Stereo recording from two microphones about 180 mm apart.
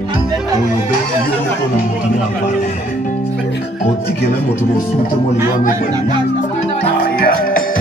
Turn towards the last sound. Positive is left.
turn(degrees=55)  # may be behind; listen again after turning